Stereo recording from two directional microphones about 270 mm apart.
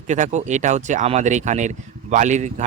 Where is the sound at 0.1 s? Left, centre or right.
Right.